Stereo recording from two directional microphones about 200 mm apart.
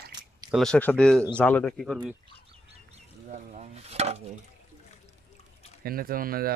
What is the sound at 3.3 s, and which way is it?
Chopping, 35° right (ahead or behind).